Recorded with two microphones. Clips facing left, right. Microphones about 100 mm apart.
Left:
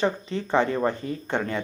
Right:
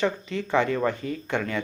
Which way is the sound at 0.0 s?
30° left (ahead or behind).